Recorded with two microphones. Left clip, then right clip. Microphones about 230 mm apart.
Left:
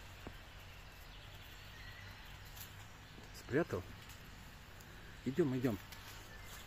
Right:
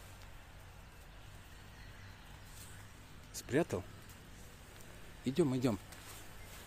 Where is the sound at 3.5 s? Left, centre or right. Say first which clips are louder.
Right 2 dB; right.